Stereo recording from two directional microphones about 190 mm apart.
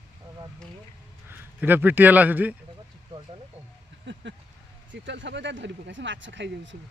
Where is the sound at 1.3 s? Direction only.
10° right (ahead or behind).